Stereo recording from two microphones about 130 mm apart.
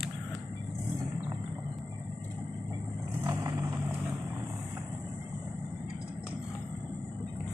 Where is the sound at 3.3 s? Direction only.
20° right (ahead or behind).